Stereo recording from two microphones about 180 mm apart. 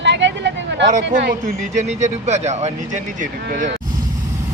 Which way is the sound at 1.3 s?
45° right (ahead or behind).